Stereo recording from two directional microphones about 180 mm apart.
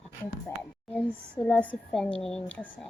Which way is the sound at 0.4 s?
5° left (ahead or behind).